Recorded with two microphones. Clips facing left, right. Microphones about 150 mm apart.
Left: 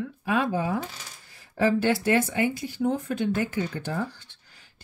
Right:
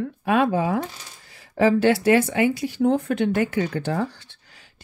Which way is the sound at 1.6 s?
90° right.